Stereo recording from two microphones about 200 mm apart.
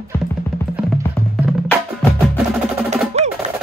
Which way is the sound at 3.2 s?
35° right (ahead or behind).